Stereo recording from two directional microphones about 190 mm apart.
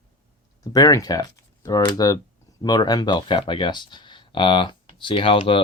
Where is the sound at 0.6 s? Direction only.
20° left (ahead or behind).